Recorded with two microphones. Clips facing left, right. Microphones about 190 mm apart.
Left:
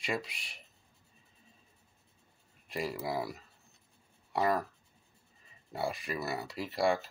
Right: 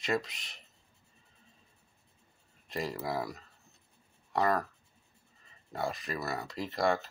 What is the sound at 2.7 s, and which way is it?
Speech, 10° left (ahead or behind).